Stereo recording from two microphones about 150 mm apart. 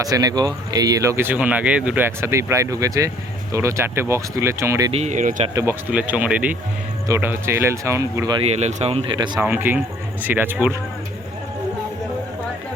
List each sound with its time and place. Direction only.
0.0 s speech: 25° right (ahead or behind)
4.9 s speech: 50° right (ahead or behind)
5.9 s speech: 10° right (ahead or behind)
8.4 s speech: 45° right (ahead or behind)
9.1 s speech: 30° right (ahead or behind)
9.4 s speech: 15° right (ahead or behind)